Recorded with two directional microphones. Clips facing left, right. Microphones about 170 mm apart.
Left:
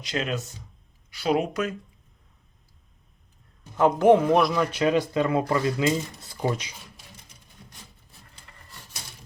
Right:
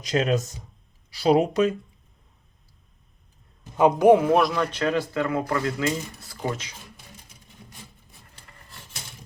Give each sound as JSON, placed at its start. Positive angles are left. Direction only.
{"t": 0.0, "sound": "speech", "side_deg": -40}
{"t": 3.8, "sound": "speech", "side_deg": -15}